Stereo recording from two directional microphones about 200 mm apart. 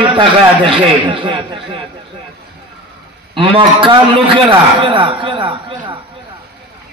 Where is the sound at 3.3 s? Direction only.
25° right (ahead or behind).